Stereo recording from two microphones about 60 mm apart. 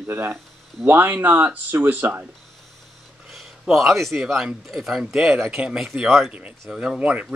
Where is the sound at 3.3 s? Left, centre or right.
Centre.